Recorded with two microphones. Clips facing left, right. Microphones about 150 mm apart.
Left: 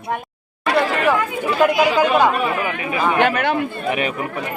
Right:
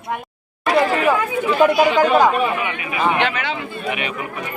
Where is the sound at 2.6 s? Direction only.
35° left (ahead or behind).